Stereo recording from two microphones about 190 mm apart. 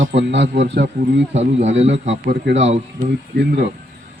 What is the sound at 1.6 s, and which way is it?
Speech, 35° right (ahead or behind).